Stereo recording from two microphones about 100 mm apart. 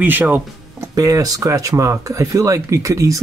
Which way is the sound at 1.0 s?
35° right (ahead or behind).